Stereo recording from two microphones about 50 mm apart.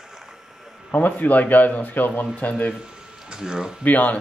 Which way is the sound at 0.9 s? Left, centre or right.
Left.